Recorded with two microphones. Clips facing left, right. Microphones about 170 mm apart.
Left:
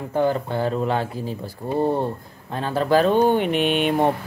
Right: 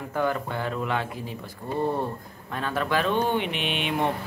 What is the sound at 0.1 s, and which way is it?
Speech, 30° left (ahead or behind).